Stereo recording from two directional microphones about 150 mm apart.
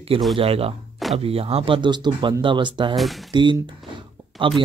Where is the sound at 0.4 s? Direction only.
40° right (ahead or behind).